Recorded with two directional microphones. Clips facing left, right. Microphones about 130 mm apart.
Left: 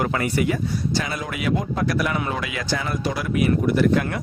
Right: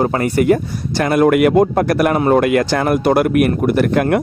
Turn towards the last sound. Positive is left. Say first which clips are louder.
# right 5 dB
turn(degrees=-60)  # may be behind; listen again after turning